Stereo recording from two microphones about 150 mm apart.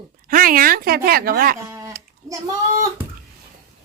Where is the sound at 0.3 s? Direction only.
70° right (ahead or behind).